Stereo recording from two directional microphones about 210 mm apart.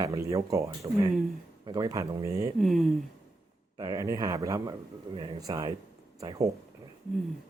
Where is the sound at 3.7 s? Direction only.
15° right (ahead or behind).